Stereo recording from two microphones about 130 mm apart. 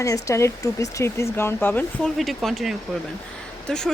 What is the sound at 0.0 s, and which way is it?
Speech, 25° left (ahead or behind).